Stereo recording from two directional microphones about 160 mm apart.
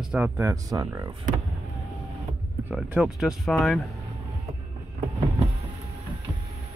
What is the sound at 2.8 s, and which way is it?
Speech, 5° right (ahead or behind).